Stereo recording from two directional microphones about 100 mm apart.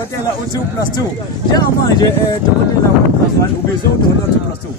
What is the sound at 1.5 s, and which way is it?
Speech, 40° left (ahead or behind).